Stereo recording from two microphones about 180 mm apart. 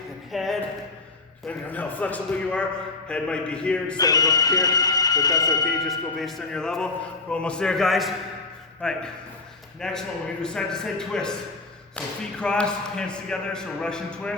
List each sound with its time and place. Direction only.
0.3 s a sound: centre (ahead or behind)
1.5 s a man's voice: 10° left (ahead or behind)
3.9 s speech: 20° left (ahead or behind)
5.8 s speech: centre (ahead or behind)